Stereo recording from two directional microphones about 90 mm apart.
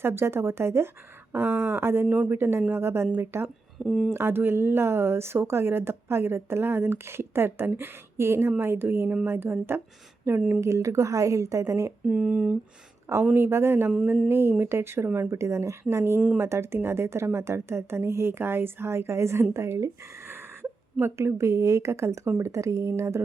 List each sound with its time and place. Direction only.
0.0 s speech: 25° right (ahead or behind)
3.8 s speech: 5° right (ahead or behind)
4.1 s a woman's voice: 25° right (ahead or behind)
12.0 s speech: 15° right (ahead or behind)
13.3 s speech: 25° right (ahead or behind)
13.9 s speech: 10° right (ahead or behind); by 19.9 s 30° right (ahead or behind)
21.0 s a woman's voice: 30° right (ahead or behind)